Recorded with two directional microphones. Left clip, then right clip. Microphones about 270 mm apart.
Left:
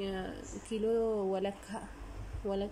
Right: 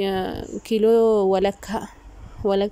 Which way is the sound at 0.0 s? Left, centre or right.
Right.